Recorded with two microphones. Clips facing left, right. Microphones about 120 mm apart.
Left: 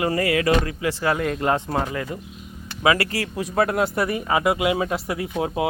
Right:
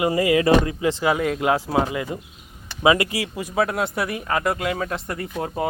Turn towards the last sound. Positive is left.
turn(degrees=5)  # may be behind; listen again after turning